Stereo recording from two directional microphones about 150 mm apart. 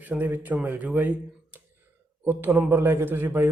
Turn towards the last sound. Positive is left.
turn(degrees=-15)  # may be behind; listen again after turning